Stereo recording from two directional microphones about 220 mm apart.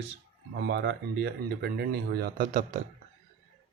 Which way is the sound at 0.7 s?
55° right (ahead or behind).